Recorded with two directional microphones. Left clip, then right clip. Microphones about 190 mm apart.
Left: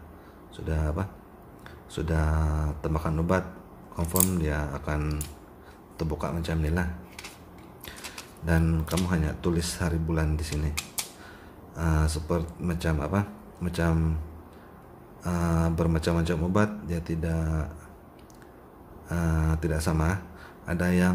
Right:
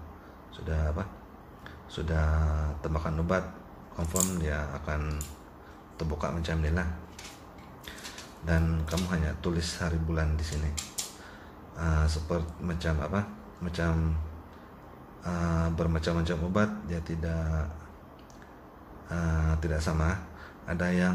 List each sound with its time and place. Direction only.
0.7 s speech: 30° left (ahead or behind)
5.9 s speech: 25° left (ahead or behind)
8.5 s speech: 30° left (ahead or behind)
10.5 s speech: 20° left (ahead or behind)
11.7 s speech: 30° left (ahead or behind)
15.2 s speech: 30° left (ahead or behind)
19.0 s speech: 30° left (ahead or behind)